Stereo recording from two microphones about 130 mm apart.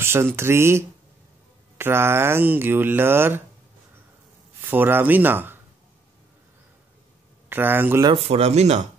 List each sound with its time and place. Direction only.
0.0 s speech: 20° right (ahead or behind)
4.6 s speech: 15° right (ahead or behind)
7.4 s speech: 15° right (ahead or behind)
8.3 s speech: 55° right (ahead or behind)